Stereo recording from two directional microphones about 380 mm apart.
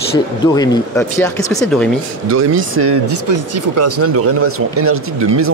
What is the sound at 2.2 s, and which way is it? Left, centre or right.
Speech, right.